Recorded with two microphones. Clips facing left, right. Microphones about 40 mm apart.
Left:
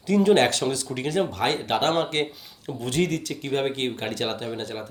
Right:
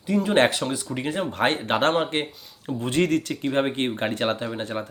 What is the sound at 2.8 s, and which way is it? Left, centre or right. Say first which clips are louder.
Speech: right 3 dB; right.